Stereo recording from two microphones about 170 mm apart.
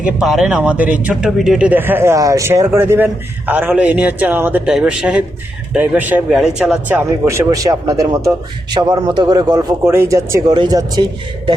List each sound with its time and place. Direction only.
0.0 s speech: centre (ahead or behind); by 11.5 s 25° right (ahead or behind)